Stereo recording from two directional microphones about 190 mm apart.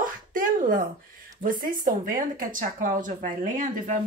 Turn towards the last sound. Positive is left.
turn(degrees=-45)  # may be behind; listen again after turning